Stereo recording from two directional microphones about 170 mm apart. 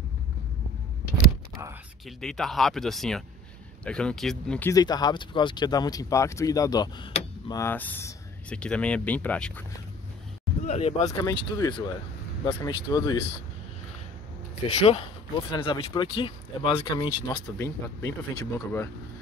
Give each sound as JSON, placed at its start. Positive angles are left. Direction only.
{"t": 2.0, "sound": "speech", "side_deg": 5}
{"t": 4.7, "sound": "speech", "side_deg": 25}
{"t": 10.6, "sound": "speech", "side_deg": 40}
{"t": 11.1, "sound": "speech", "side_deg": 20}
{"t": 14.9, "sound": "speech", "side_deg": 30}
{"t": 17.6, "sound": "speech", "side_deg": 15}